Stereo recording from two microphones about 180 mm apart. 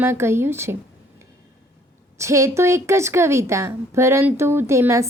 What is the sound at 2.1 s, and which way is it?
Speech, 15° right (ahead or behind).